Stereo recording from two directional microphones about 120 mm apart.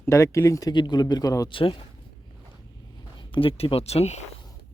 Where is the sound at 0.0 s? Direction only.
25° left (ahead or behind).